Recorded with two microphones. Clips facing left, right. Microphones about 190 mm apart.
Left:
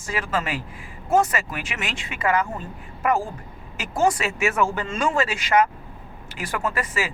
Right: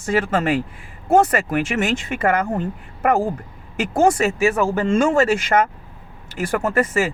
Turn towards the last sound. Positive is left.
turn(degrees=-45)  # may be behind; listen again after turning